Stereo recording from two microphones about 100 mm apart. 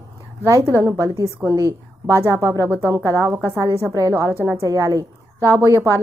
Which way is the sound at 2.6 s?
20° left (ahead or behind).